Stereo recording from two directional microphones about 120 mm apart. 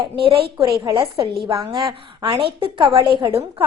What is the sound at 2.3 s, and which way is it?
A woman's voice, 45° right (ahead or behind).